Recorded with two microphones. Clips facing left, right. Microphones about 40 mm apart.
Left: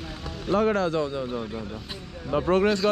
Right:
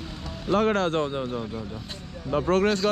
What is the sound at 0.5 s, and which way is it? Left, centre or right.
Speech, right.